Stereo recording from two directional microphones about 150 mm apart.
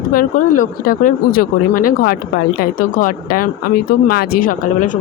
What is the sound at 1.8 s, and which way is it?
Speech, 85° left.